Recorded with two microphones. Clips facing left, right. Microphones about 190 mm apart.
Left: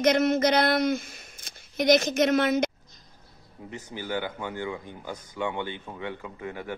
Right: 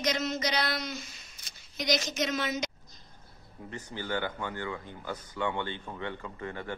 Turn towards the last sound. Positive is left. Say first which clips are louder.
# left 2 dB
turn(degrees=10)  # may be behind; listen again after turning